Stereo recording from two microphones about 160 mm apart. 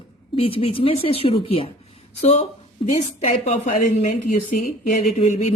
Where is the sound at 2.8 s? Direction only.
50° left (ahead or behind).